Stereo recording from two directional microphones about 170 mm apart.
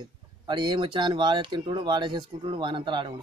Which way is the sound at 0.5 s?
25° right (ahead or behind).